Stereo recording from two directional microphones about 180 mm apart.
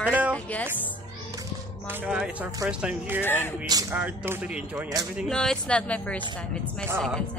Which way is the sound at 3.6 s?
20° right (ahead or behind).